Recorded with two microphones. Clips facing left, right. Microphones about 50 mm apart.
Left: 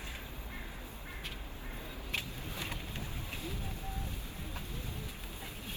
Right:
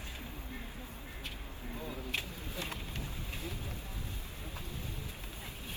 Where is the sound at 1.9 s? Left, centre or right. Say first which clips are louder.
Right 1 dB; right.